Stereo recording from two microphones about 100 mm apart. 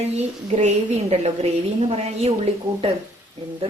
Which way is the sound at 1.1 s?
90° right.